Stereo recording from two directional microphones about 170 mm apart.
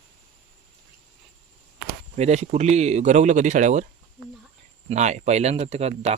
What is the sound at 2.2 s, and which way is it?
Speech, 40° right (ahead or behind).